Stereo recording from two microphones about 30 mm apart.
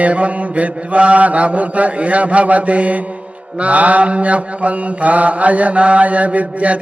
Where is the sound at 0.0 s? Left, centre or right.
Right.